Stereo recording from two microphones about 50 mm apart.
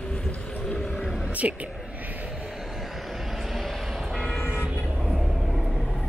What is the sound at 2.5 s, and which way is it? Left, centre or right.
Vehicle, centre.